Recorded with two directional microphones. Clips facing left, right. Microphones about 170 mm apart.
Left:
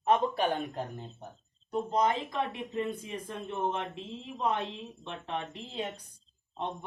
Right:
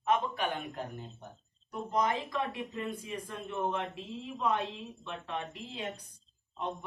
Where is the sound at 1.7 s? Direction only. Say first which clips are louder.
Left 3 dB; 25° left (ahead or behind).